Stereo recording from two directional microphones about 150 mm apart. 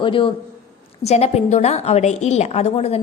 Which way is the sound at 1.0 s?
45° left (ahead or behind).